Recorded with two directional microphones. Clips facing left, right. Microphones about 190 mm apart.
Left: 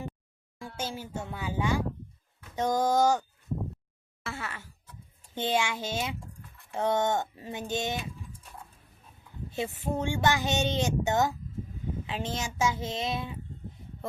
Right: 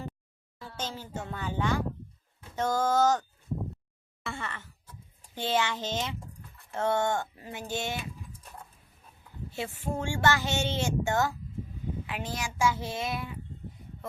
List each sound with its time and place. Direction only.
0.6 s a child's voice: 10° left (ahead or behind)
9.5 s a child's voice: 20° left (ahead or behind)